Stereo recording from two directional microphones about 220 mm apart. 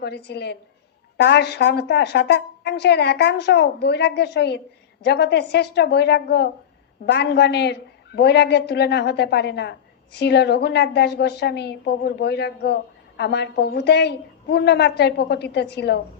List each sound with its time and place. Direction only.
0.0 s a woman's voice: 50° left (ahead or behind)